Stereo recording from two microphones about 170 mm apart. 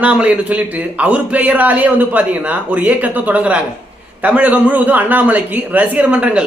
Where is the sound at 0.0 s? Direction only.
10° right (ahead or behind).